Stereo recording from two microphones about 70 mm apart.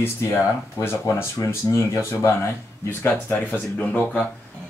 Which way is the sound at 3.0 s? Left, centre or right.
Left.